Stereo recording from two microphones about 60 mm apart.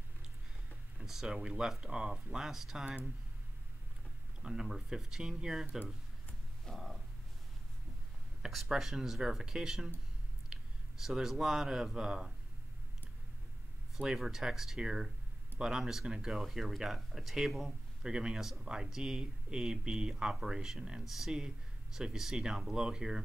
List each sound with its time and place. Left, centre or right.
0.9 s speech: centre
4.4 s speech: centre
6.7 s purr: centre
8.4 s speech: centre
13.9 s speech: centre
18.0 s speech: centre